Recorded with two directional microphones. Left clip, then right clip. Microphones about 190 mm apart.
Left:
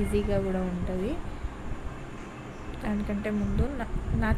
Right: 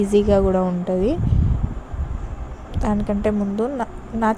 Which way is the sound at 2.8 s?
35° right (ahead or behind).